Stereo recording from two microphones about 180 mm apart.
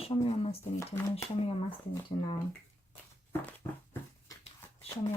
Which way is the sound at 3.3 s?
10° left (ahead or behind).